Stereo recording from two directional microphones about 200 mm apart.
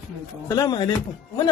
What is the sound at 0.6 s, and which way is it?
Speech, 20° left (ahead or behind).